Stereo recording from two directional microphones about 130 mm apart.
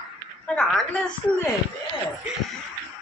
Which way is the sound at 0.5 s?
10° left (ahead or behind).